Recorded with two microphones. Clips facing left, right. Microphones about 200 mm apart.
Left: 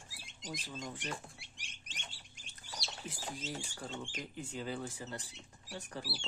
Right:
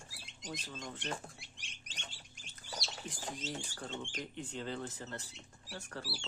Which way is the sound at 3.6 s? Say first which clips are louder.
Even; 5° left (ahead or behind).